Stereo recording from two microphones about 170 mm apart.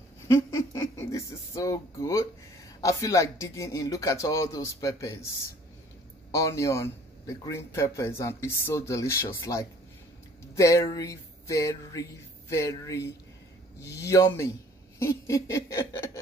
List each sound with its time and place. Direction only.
0.3 s speech: 15° left (ahead or behind)
6.3 s speech: 20° left (ahead or behind)